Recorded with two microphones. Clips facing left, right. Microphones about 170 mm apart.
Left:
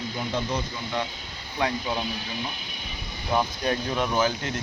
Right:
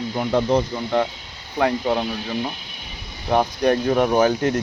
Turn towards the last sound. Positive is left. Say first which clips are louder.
# right 8 dB
turn(degrees=-55)  # may be behind; listen again after turning